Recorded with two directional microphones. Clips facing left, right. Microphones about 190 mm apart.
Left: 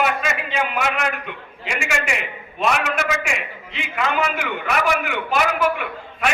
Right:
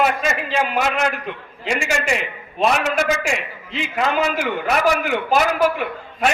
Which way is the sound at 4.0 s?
35° right (ahead or behind).